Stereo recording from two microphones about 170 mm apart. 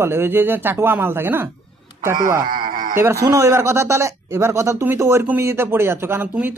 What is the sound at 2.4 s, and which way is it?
Speech, 55° right (ahead or behind).